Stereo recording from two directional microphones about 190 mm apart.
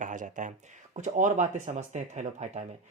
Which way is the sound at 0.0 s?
40° right (ahead or behind).